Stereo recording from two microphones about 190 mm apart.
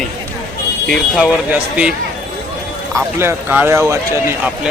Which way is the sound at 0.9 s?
Centre (ahead or behind).